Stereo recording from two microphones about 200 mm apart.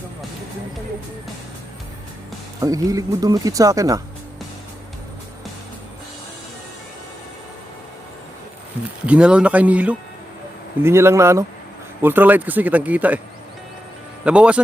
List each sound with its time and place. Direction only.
2.6 s speech: 15° right (ahead or behind)
9.0 s speech: 5° right (ahead or behind)
14.3 s speech: 5° right (ahead or behind)